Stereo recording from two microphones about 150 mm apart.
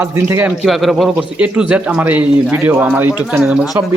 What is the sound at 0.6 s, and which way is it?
Speech, centre (ahead or behind).